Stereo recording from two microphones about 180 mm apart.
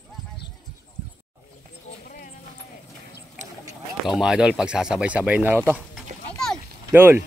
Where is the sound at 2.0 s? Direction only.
55° left (ahead or behind).